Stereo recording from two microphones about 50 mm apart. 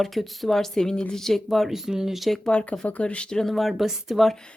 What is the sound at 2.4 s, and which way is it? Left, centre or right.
Speech, left.